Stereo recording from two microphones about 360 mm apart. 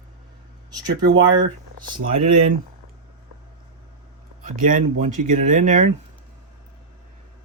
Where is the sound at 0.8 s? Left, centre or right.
Centre.